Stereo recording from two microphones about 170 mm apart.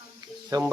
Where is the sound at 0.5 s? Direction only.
25° right (ahead or behind).